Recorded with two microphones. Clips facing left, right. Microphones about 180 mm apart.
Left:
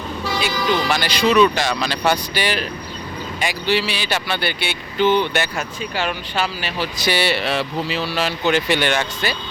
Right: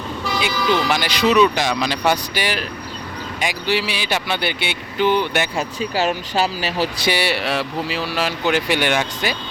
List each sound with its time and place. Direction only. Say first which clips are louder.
0.5 s speech: right 2 dB; 15° left (ahead or behind)
0.9 s speech: even; 15° right (ahead or behind)
5.5 s speech: right 3 dB; 35° right (ahead or behind)
7.1 s speech: left 3 dB; 15° right (ahead or behind)